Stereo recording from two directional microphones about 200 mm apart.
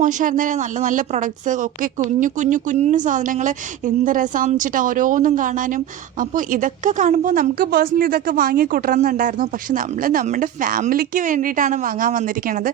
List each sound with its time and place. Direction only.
0.0 s a woman's voice: 40° right (ahead or behind)